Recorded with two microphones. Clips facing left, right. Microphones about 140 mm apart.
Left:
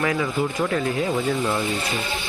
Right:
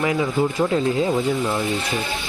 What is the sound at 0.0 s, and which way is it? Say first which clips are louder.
Speech: right 3 dB; 20° right (ahead or behind).